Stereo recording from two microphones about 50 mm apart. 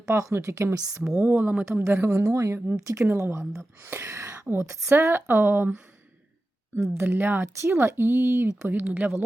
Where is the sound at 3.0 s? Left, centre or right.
Right.